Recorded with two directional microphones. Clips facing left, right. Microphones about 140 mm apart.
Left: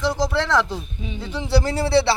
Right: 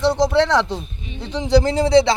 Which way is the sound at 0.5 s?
25° right (ahead or behind).